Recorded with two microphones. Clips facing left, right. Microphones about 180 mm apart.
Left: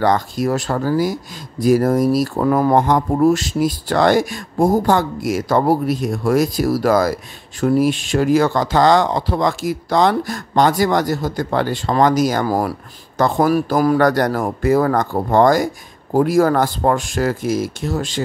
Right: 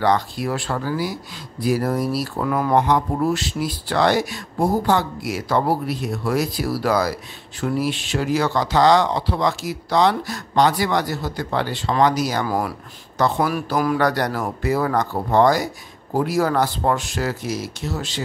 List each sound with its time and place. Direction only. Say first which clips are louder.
0.0 s speech: left 3 dB; 45° left (ahead or behind)